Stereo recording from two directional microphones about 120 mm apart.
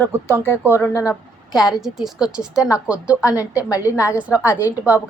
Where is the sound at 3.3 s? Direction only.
30° left (ahead or behind).